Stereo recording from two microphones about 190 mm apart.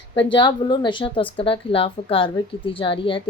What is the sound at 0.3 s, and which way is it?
A woman's voice, 25° left (ahead or behind).